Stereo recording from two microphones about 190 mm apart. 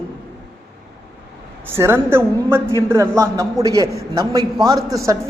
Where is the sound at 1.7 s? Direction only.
10° right (ahead or behind).